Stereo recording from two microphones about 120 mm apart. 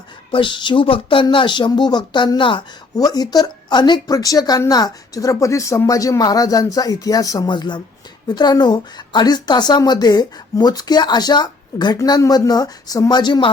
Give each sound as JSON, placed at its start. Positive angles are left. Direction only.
{"t": 0.3, "sound": "speech", "side_deg": 45}